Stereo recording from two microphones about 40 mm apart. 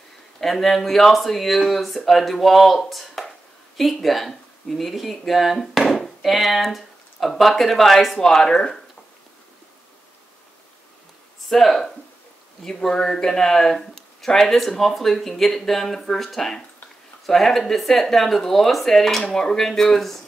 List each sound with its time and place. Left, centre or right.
0.4 s speech: centre
8.2 s speech: centre
11.4 s speech: centre